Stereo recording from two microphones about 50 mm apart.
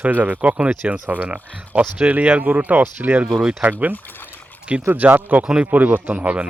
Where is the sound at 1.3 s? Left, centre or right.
Centre.